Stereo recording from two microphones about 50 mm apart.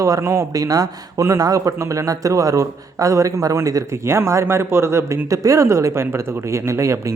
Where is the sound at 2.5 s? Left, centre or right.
Right.